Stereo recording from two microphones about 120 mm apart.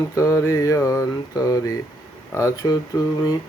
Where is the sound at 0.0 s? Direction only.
25° left (ahead or behind).